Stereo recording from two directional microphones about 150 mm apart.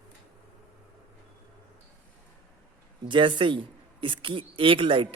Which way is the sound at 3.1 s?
35° right (ahead or behind).